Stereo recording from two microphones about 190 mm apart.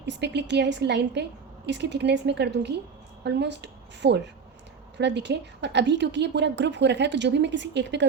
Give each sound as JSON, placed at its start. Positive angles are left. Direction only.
{"t": 0.0, "sound": "a woman's voice", "side_deg": -65}